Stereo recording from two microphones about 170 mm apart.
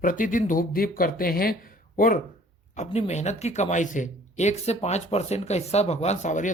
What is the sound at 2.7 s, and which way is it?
Speech, 40° left (ahead or behind).